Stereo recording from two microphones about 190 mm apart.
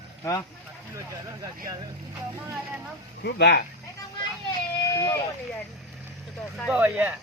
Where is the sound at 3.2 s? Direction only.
65° left (ahead or behind).